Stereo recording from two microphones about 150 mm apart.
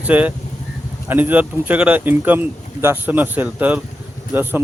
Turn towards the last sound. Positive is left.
turn(degrees=-15)  # may be behind; listen again after turning